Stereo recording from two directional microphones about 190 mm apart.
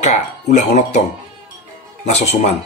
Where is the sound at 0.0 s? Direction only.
35° left (ahead or behind).